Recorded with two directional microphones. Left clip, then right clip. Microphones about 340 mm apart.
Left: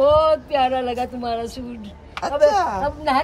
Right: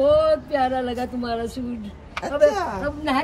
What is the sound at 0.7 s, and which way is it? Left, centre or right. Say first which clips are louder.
Speech: left 3 dB; centre.